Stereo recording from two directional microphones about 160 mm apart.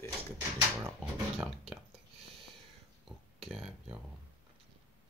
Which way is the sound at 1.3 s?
Centre (ahead or behind).